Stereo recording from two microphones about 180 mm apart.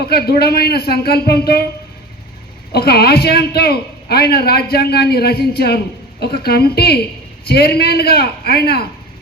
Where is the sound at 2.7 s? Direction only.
60° left (ahead or behind).